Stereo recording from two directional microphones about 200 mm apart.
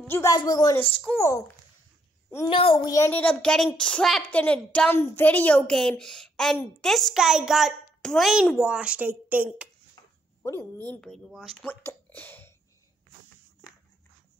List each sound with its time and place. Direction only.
0.0 s speech: 15° left (ahead or behind)
1.1 s a woman's voice: centre (ahead or behind)
2.4 s a child's voice: 25° left (ahead or behind)
2.9 s a woman's voice: 10° left (ahead or behind); by 9.7 s 10° right (ahead or behind)
10.4 s a woman's voice: 10° left (ahead or behind)
11.8 s a sound: 10° left (ahead or behind)